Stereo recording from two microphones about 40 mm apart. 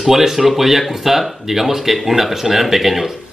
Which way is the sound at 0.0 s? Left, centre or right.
Centre.